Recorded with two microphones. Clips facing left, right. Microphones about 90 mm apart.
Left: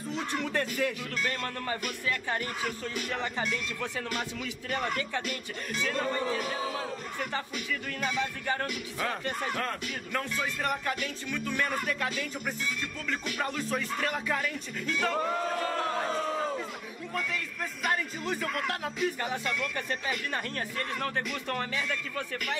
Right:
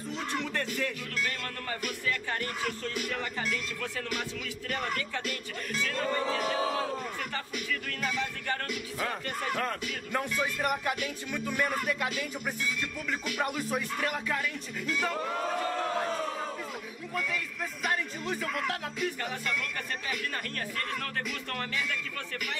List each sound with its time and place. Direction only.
0.6 s speech: 15° left (ahead or behind)
2.3 s speech: 10° left (ahead or behind)
4.6 s speech: centre (ahead or behind)
7.5 s speech: centre (ahead or behind)
9.5 s music: 5° right (ahead or behind)
13.3 s speech: 10° right (ahead or behind)
17.1 s speech: 5° right (ahead or behind)
20.5 s speech: 20° left (ahead or behind)